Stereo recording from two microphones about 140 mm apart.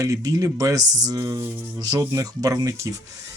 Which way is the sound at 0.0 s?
25° right (ahead or behind).